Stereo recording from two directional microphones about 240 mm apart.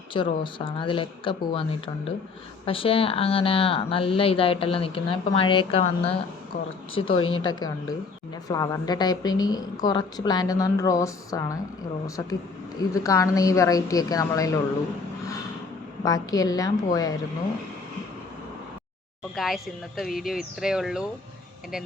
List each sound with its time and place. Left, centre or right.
0.1 s speech: left
2.6 s speech: left
7.4 s a woman's voice: centre
16.0 s a woman's voice: centre
19.4 s speech: centre